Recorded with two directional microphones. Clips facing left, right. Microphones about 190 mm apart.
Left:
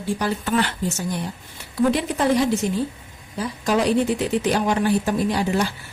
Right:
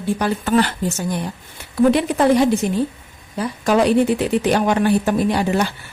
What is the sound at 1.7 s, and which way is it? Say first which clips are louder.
A woman's voice: right 5 dB; 60° right (ahead or behind).